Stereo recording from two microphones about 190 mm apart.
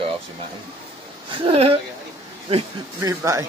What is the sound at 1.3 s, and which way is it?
Speech, 30° right (ahead or behind).